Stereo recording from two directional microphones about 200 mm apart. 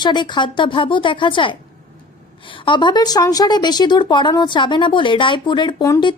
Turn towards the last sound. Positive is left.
turn(degrees=20)  # may be behind; listen again after turning